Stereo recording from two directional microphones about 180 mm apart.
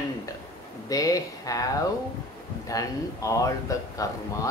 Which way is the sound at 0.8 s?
20° left (ahead or behind).